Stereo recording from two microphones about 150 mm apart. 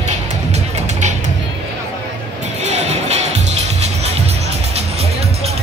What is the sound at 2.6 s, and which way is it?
Music, 50° right (ahead or behind).